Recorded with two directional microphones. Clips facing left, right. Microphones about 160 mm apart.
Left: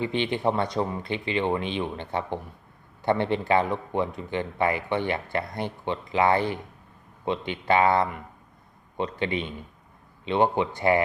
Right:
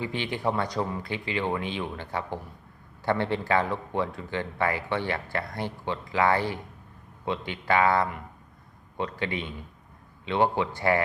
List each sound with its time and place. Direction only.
0.0 s a man's voice: 20° left (ahead or behind)